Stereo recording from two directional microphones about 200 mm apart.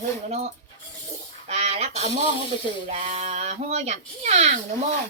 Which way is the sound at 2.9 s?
35° right (ahead or behind).